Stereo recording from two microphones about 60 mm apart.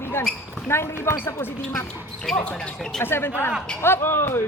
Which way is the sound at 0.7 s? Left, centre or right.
Left.